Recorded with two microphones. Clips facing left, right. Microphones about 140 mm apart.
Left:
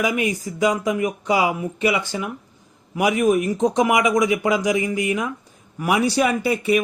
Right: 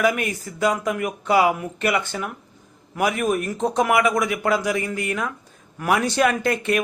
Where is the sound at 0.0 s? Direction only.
15° left (ahead or behind).